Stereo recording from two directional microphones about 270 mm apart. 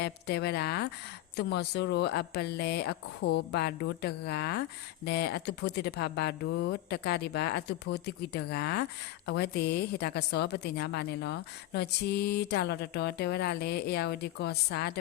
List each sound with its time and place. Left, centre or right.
0.0 s a woman's voice: left